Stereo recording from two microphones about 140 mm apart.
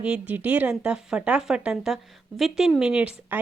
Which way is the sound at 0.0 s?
10° right (ahead or behind).